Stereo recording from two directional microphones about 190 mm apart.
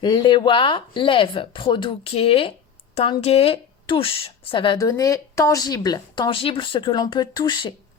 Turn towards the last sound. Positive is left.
turn(degrees=20)  # may be behind; listen again after turning